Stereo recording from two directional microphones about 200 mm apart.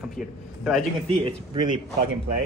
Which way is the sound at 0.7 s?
Centre (ahead or behind).